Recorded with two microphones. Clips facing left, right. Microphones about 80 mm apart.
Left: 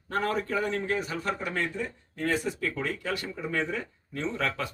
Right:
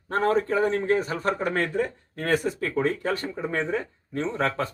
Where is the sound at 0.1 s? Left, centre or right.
Right.